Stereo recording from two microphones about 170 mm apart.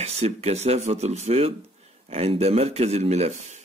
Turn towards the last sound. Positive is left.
turn(degrees=-45)  # may be behind; listen again after turning